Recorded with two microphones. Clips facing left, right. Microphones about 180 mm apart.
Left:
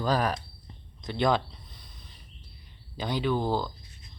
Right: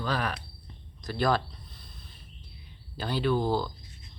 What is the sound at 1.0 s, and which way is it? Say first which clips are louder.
Speech: left 1 dB; 20° left (ahead or behind).